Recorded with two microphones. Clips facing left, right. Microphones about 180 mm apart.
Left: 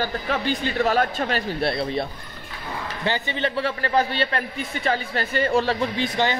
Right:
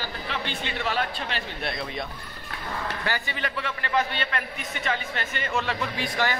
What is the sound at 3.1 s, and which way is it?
A man's voice, 25° left (ahead or behind).